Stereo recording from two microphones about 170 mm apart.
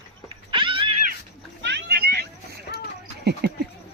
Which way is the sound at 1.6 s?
80° right.